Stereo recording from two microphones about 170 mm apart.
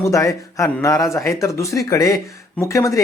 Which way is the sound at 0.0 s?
20° left (ahead or behind).